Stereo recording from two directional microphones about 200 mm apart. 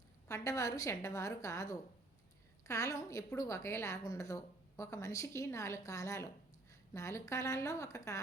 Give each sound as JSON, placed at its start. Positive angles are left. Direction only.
{"t": 0.3, "sound": "a woman's voice", "side_deg": 15}